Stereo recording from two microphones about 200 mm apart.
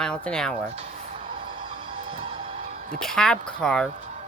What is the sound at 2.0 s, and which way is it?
Music, 25° right (ahead or behind).